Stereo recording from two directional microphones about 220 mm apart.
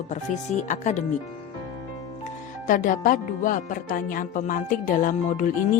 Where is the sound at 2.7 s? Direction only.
35° left (ahead or behind).